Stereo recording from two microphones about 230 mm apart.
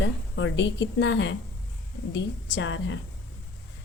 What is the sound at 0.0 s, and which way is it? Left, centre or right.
A woman's voice, left.